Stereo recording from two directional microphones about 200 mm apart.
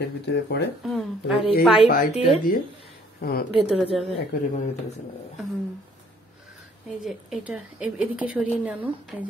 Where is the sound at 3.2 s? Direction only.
50° left (ahead or behind).